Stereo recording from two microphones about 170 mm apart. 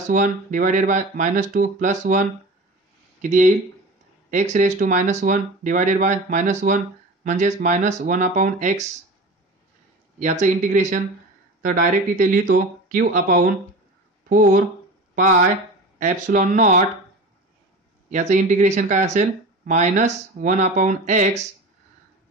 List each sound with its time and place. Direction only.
0.1 s speech: 50° right (ahead or behind)
10.1 s speech: 45° right (ahead or behind)
16.0 s speech: 50° right (ahead or behind)
18.1 s speech: 45° right (ahead or behind)